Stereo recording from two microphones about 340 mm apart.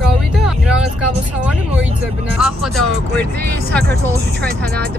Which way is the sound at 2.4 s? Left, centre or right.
Centre.